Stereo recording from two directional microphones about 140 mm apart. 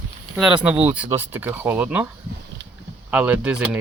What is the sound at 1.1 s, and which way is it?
Speech, 15° right (ahead or behind).